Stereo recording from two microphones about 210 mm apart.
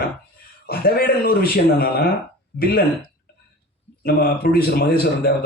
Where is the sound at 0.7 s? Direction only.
45° left (ahead or behind).